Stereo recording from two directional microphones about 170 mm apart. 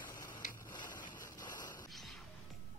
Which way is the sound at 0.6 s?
25° left (ahead or behind).